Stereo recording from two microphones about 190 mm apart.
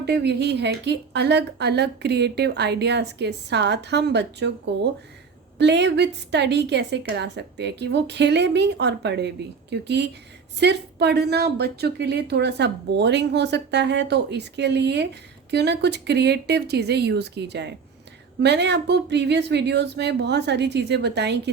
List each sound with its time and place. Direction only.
0.0 s a woman's voice: 60° right (ahead or behind)
5.5 s a woman's voice: 65° right (ahead or behind)